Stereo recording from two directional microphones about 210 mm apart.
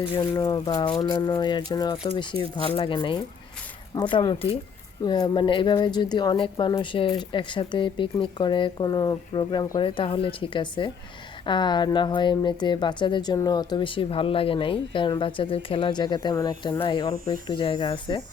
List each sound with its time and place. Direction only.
0.1 s speech: 20° left (ahead or behind)